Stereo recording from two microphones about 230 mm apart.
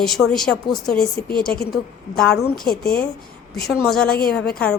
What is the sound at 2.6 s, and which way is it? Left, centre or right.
Speech, left.